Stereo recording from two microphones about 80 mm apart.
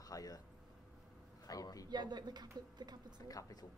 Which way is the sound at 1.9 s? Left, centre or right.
Right.